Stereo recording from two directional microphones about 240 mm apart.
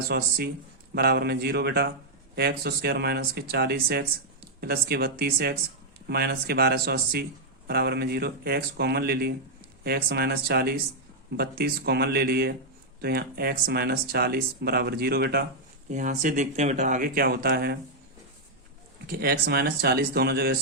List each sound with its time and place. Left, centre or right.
0.1 s speech: right
19.0 s speech: right